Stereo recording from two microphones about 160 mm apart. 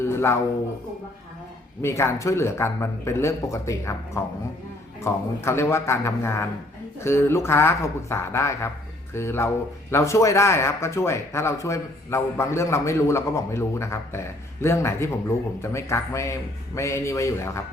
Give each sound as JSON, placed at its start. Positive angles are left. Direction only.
{"t": 0.0, "sound": "music", "side_deg": 15}
{"t": 1.8, "sound": "speech", "side_deg": 15}